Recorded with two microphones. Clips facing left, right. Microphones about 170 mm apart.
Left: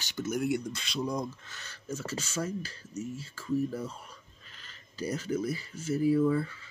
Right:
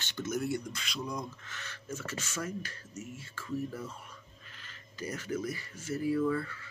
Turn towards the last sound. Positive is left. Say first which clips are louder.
# left 4 dB
turn(degrees=20)  # may be behind; listen again after turning